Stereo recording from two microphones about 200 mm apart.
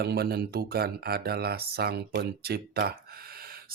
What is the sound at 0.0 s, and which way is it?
Speech, 55° right (ahead or behind).